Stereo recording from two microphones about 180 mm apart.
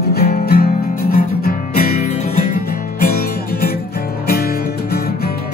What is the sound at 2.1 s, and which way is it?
Music, 35° left (ahead or behind).